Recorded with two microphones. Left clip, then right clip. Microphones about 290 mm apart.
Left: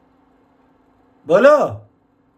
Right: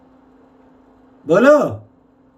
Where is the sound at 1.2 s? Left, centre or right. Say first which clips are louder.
Even; centre.